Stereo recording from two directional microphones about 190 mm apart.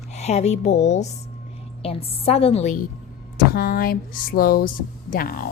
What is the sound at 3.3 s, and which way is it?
Speech, 50° left (ahead or behind).